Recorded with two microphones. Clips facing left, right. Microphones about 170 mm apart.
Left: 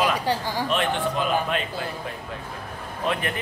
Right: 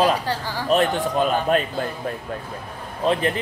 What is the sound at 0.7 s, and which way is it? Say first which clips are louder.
Speech: right 7 dB; 40° right (ahead or behind).